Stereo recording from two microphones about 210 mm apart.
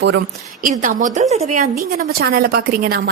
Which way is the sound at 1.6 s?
45° right (ahead or behind).